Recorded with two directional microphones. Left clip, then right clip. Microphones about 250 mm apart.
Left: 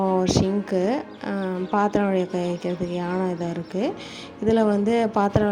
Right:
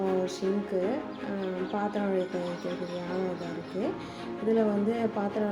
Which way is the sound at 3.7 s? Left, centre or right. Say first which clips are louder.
Left 5 dB; left.